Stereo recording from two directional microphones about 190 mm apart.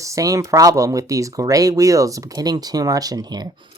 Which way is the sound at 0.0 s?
15° right (ahead or behind).